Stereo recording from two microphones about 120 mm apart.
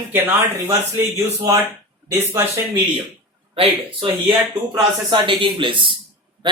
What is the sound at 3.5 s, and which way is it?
Speech, 50° right (ahead or behind).